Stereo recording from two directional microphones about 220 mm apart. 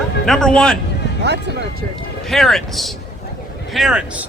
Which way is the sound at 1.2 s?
50° right (ahead or behind).